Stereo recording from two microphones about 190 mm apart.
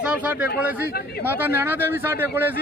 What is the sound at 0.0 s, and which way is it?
Speech, 5° right (ahead or behind).